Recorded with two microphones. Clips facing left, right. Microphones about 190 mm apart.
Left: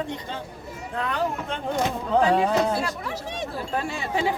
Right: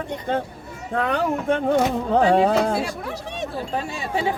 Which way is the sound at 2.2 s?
30° right (ahead or behind).